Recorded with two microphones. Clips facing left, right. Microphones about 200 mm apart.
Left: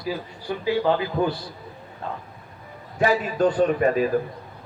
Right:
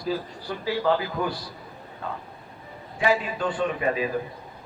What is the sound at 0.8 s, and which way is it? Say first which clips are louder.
Speech: even; 20° left (ahead or behind).